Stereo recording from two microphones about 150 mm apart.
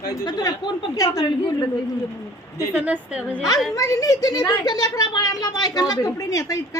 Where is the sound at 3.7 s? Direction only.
20° left (ahead or behind).